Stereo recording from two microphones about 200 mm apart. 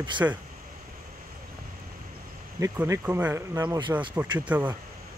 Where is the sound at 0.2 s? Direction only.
10° right (ahead or behind).